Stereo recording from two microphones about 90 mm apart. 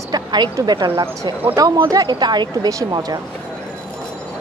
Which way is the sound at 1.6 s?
40° right (ahead or behind).